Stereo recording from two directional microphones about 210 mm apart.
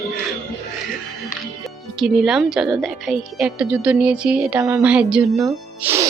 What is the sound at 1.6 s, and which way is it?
A woman's voice, centre (ahead or behind).